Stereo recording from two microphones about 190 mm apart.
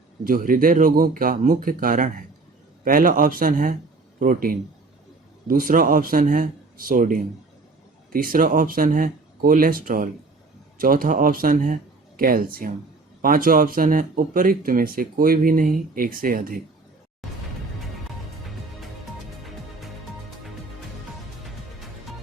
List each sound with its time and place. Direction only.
0.3 s speech: 45° right (ahead or behind)